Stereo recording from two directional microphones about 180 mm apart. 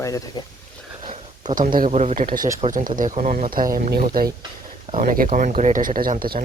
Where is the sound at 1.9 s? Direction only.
35° right (ahead or behind).